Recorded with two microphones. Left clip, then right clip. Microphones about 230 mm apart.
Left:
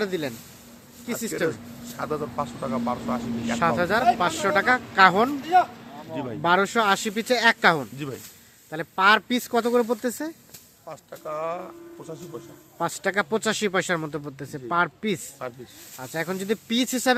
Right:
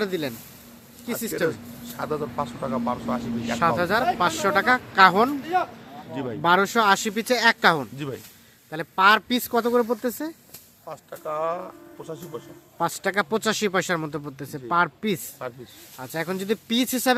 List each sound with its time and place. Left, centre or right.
0.0 s speech: centre
5.5 s speech: left
6.1 s speech: centre
6.4 s speech: centre
7.9 s speech: centre
8.7 s speech: centre